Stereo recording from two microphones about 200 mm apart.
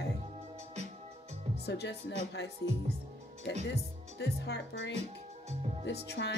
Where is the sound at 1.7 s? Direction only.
60° left (ahead or behind).